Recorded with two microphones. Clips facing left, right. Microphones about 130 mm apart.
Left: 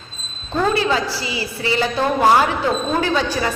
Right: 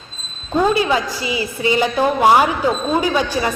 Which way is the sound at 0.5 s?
15° right (ahead or behind).